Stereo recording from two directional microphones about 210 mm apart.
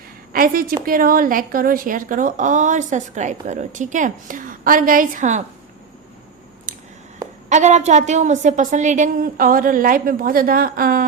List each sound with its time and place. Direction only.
0.3 s a woman's voice: 45° right (ahead or behind)
6.7 s a sound: 40° right (ahead or behind)
7.5 s speech: 35° right (ahead or behind)